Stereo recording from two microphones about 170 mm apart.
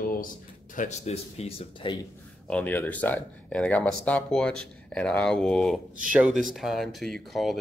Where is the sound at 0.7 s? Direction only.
40° left (ahead or behind).